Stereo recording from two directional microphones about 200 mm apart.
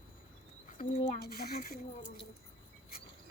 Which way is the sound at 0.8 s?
35° left (ahead or behind).